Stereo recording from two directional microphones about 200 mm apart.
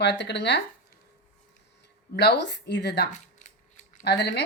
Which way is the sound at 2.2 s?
60° left (ahead or behind).